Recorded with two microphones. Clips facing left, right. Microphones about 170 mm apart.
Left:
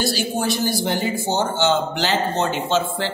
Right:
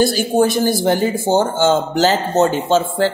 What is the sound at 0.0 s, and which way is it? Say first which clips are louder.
A woman's voice: right 8 dB; 50° right (ahead or behind).